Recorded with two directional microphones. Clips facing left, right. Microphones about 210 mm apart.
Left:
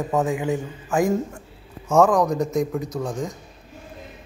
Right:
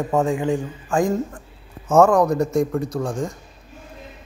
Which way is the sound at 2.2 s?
15° left (ahead or behind).